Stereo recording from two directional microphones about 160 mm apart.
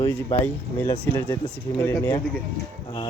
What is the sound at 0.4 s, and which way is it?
Speech, 15° left (ahead or behind).